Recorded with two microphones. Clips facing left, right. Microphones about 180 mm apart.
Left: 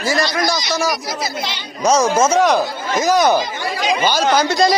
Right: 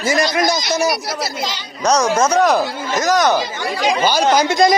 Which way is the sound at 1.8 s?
5° left (ahead or behind).